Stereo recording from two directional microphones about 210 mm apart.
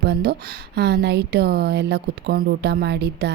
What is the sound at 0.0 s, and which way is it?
Speech, 55° right (ahead or behind).